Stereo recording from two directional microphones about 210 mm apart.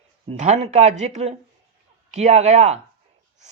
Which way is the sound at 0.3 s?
30° right (ahead or behind).